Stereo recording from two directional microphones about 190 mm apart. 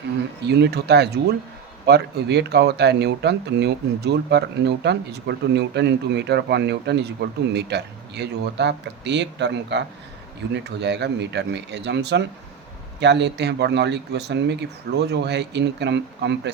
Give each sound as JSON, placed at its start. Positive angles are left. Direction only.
{"t": 0.4, "sound": "speech", "side_deg": -60}